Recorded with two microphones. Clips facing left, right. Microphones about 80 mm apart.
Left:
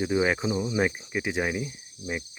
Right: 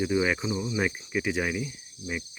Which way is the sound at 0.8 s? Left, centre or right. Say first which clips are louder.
Even; left.